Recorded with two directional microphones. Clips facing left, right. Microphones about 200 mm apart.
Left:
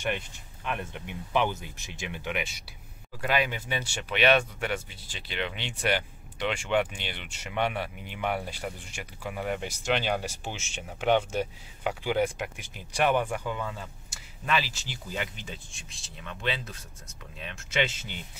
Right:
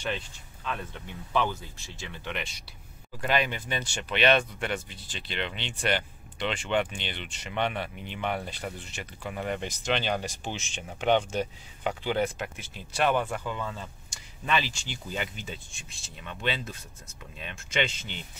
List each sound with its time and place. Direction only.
0.7 s speech: 15° left (ahead or behind)